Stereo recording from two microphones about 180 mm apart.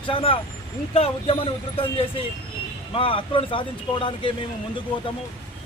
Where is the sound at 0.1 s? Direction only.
30° left (ahead or behind).